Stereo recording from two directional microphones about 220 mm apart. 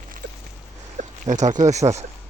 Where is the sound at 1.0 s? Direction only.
35° right (ahead or behind).